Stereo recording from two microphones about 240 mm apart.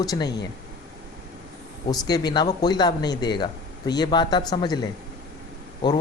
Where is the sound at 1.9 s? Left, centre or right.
Centre.